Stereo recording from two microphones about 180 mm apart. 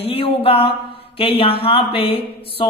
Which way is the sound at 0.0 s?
30° left (ahead or behind).